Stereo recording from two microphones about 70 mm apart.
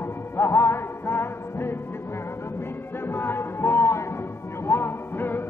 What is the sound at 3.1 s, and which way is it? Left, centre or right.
Music, left.